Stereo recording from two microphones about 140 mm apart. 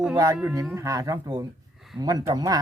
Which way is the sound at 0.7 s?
20° right (ahead or behind).